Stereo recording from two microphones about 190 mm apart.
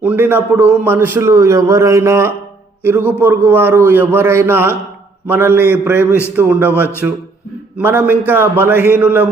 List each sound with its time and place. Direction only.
0.0 s a man's voice: 10° right (ahead or behind)